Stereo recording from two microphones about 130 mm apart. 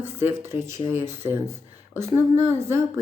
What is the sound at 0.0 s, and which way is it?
A woman's voice, 15° right (ahead or behind).